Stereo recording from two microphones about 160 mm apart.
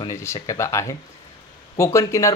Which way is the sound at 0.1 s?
15° left (ahead or behind).